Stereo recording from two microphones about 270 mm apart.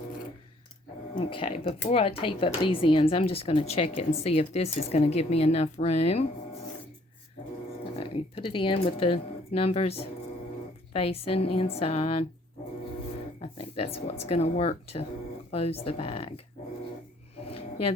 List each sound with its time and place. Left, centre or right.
1.1 s speech: left
7.9 s speech: centre
13.4 s a sound: left
14.3 s speech: left